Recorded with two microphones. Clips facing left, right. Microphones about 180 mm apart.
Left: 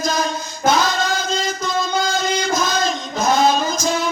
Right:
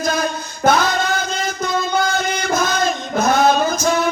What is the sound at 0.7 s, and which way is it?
Singing, 55° right (ahead or behind).